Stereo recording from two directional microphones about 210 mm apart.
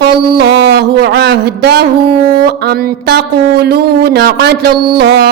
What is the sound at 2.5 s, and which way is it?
Speech, 50° right (ahead or behind).